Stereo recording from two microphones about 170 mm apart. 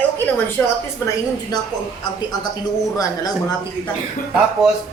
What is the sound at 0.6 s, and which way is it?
Speech, 10° left (ahead or behind).